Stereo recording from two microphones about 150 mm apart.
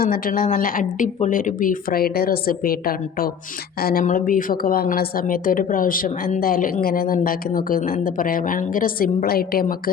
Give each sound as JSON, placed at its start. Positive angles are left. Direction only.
{"t": 0.0, "sound": "a woman's voice", "side_deg": 75}